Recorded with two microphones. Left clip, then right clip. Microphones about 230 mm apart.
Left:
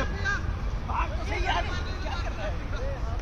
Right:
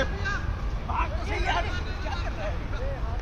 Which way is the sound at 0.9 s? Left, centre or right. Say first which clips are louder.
Right 1 dB; centre.